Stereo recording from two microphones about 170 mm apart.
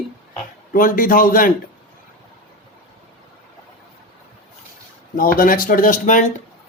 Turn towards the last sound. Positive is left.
turn(degrees=50)  # may be behind; listen again after turning